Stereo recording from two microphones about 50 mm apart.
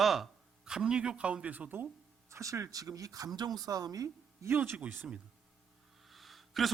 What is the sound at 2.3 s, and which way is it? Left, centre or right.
Speech, right.